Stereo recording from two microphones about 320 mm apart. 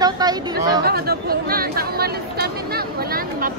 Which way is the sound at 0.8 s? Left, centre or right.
Right.